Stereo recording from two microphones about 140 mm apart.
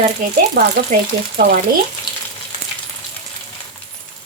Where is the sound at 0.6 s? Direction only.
90° right.